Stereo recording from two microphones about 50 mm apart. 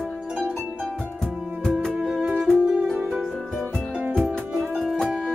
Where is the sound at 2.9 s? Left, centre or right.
Centre.